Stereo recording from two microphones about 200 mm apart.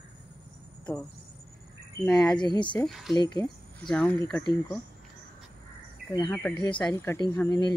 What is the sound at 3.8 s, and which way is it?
Speech, 5° left (ahead or behind).